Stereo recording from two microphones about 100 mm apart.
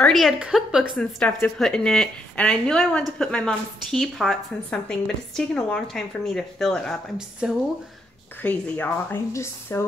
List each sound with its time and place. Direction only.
0.0 s a woman's voice: centre (ahead or behind)
0.9 s a woman's voice: 10° left (ahead or behind)
7.2 s speech: 5° right (ahead or behind)
8.4 s speech: 20° left (ahead or behind)